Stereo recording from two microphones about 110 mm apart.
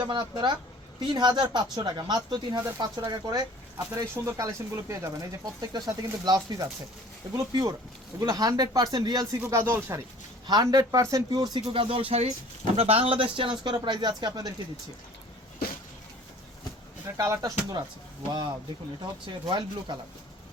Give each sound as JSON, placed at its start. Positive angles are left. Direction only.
{"t": 0.0, "sound": "speech", "side_deg": -45}
{"t": 9.4, "sound": "speech", "side_deg": -25}
{"t": 10.4, "sound": "speech", "side_deg": -40}
{"t": 11.7, "sound": "speech", "side_deg": -55}
{"t": 17.2, "sound": "speech", "side_deg": -25}
{"t": 18.3, "sound": "speech", "side_deg": -40}